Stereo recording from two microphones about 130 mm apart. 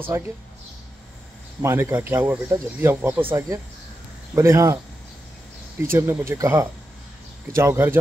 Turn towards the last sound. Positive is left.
turn(degrees=-20)  # may be behind; listen again after turning